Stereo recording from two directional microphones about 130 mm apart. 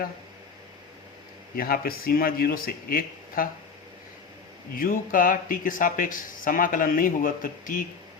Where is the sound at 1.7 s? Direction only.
90° left.